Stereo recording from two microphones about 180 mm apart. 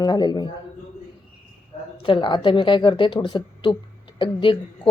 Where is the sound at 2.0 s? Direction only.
30° left (ahead or behind).